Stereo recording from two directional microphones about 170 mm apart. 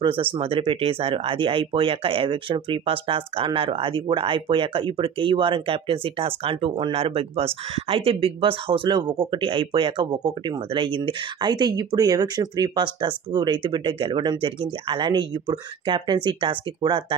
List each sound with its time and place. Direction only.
0.0 s speech: 30° right (ahead or behind)